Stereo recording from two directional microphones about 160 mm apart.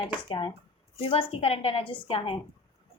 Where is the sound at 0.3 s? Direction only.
30° left (ahead or behind).